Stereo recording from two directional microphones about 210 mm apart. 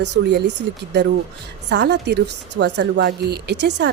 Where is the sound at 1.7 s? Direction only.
55° right (ahead or behind).